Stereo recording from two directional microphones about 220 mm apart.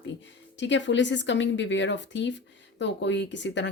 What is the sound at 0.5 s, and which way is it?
Speech, 55° left (ahead or behind).